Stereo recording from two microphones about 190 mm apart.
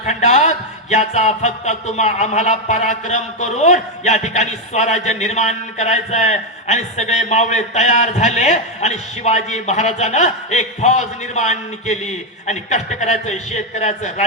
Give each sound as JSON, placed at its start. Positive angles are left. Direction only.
{"t": 0.1, "sound": "speech", "side_deg": 40}